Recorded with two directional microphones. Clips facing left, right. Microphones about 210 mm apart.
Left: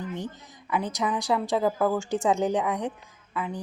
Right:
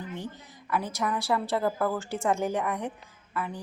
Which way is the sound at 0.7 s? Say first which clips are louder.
Left 2 dB; 20° left (ahead or behind).